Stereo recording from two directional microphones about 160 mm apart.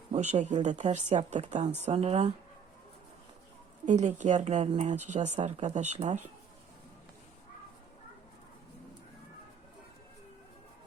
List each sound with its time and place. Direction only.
0.1 s speech: 45° right (ahead or behind)
3.8 s speech: 50° right (ahead or behind)